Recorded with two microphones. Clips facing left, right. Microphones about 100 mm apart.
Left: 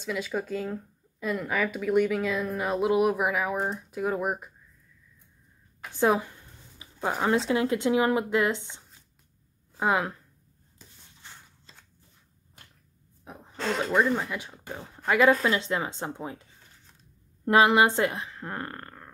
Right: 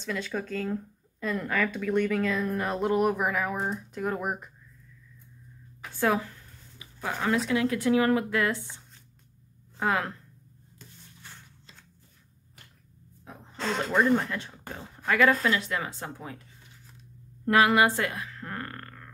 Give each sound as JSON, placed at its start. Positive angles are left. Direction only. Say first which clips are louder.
{"t": 0.0, "sound": "speech", "louder": "left 2 dB", "side_deg": 5}
{"t": 5.9, "sound": "speech", "louder": "left 2 dB", "side_deg": 20}
{"t": 13.2, "sound": "throat clearing", "louder": "left 1 dB", "side_deg": 20}
{"t": 13.7, "sound": "a woman's voice", "louder": "right 1 dB", "side_deg": 0}
{"t": 17.5, "sound": "a woman's voice", "louder": "left 2 dB", "side_deg": 25}